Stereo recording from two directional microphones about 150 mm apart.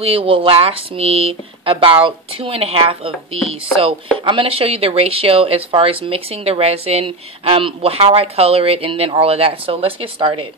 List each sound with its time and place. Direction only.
0.0 s speech: 35° right (ahead or behind)